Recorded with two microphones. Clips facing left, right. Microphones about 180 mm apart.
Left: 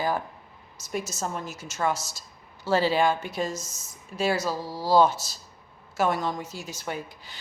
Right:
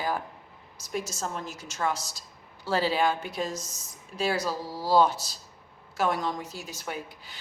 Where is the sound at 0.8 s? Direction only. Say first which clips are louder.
Left 2 dB; 5° left (ahead or behind).